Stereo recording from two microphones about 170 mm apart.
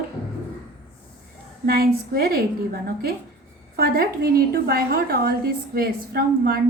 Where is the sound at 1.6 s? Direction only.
65° right (ahead or behind).